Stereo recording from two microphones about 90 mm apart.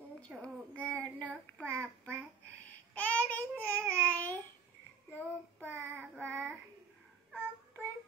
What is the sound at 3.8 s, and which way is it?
Babbling, 20° left (ahead or behind).